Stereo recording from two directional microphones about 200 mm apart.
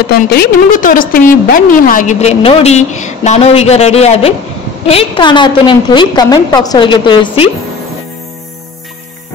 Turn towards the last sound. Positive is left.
turn(degrees=25)  # may be behind; listen again after turning